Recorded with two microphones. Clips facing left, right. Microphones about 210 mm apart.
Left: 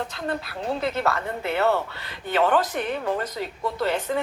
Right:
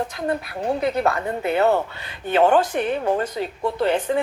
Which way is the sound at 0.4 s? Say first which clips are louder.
Right 4 dB; 20° right (ahead or behind).